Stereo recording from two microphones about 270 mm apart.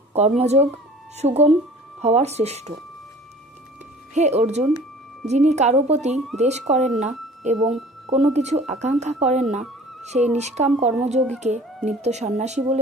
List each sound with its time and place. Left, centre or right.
0.4 s speech: right
4.1 s speech: right
7.5 s speech: centre
8.1 s speech: right